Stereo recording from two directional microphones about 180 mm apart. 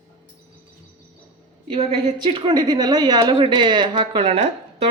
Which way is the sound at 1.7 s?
35° right (ahead or behind).